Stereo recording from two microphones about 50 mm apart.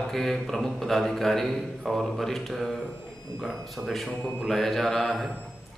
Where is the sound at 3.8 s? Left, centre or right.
Centre.